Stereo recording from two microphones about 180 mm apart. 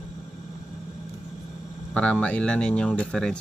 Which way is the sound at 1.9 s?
5° left (ahead or behind).